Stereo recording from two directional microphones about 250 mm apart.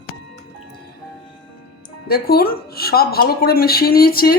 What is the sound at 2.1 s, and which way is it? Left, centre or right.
Speech, left.